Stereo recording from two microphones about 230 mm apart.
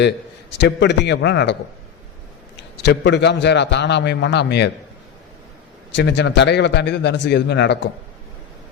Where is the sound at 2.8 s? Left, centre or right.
Left.